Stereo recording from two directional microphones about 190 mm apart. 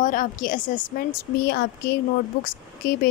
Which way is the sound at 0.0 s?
45° left (ahead or behind).